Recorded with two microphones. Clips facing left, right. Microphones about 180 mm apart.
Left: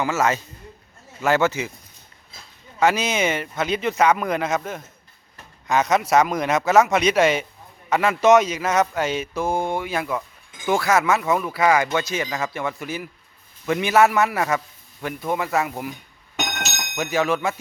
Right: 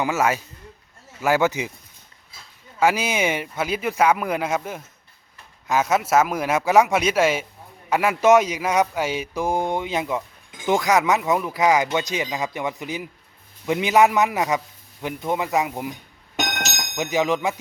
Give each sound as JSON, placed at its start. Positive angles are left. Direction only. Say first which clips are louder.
{"t": 0.0, "sound": "speech", "louder": "even", "side_deg": -15}
{"t": 2.8, "sound": "a man's voice", "louder": "even", "side_deg": -10}
{"t": 16.9, "sound": "speech", "louder": "even", "side_deg": -15}